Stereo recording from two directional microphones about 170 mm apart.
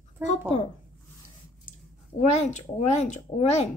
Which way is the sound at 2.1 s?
45° left (ahead or behind).